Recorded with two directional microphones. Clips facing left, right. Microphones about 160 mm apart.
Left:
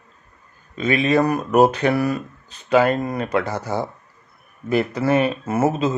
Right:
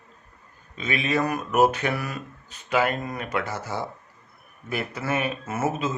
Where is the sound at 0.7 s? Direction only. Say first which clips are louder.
Left 7 dB; 45° left (ahead or behind).